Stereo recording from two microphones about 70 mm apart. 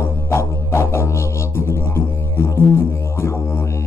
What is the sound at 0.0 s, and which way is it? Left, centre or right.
Music, left.